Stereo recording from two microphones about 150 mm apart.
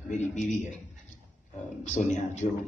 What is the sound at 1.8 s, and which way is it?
Speech, 50° left (ahead or behind).